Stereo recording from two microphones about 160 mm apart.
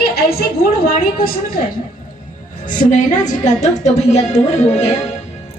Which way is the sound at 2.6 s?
55° left (ahead or behind).